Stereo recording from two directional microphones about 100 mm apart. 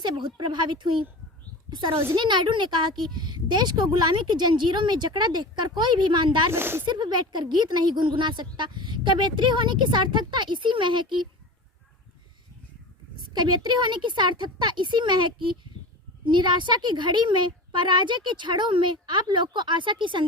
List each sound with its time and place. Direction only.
0.0 s a woman's voice: 50° right (ahead or behind)
6.5 s speech: 25° right (ahead or behind)
6.8 s a woman's voice: 50° right (ahead or behind)
13.3 s a woman's voice: 50° right (ahead or behind)